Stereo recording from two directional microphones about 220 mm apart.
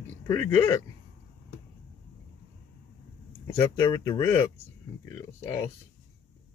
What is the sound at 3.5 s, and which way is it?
Speech, 20° left (ahead or behind).